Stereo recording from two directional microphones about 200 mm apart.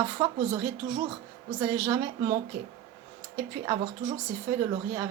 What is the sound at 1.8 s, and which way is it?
Speech, 15° right (ahead or behind).